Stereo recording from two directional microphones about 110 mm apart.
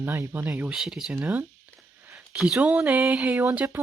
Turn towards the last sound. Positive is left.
turn(degrees=-20)  # may be behind; listen again after turning